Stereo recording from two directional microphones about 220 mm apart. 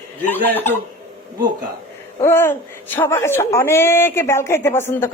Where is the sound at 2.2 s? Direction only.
10° left (ahead or behind).